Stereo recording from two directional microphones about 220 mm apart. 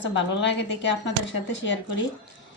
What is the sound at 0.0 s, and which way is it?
A woman's voice, 55° left (ahead or behind).